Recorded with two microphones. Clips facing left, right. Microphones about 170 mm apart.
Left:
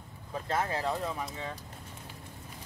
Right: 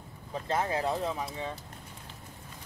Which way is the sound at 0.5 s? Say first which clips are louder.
Right 2 dB; 20° right (ahead or behind).